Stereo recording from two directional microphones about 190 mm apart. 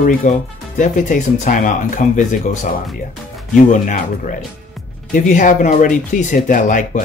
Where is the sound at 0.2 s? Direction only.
40° left (ahead or behind).